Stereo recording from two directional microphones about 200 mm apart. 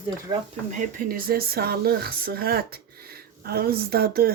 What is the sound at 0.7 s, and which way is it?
Speech, 45° right (ahead or behind).